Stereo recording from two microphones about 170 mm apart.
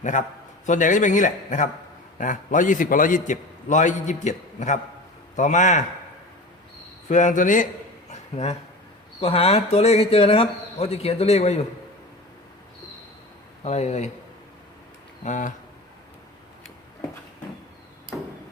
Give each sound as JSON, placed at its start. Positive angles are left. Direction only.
{"t": 0.0, "sound": "a man's voice", "side_deg": 45}
{"t": 7.1, "sound": "a man's voice", "side_deg": 45}
{"t": 8.1, "sound": "a sound", "side_deg": 40}
{"t": 9.2, "sound": "speech", "side_deg": 35}
{"t": 13.7, "sound": "speech", "side_deg": 40}
{"t": 15.2, "sound": "a man's voice", "side_deg": 50}